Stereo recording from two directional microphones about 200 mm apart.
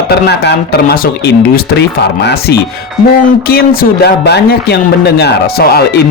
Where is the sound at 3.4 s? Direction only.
50° left (ahead or behind).